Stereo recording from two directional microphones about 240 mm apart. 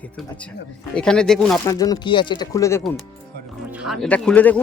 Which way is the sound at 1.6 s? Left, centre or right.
Centre.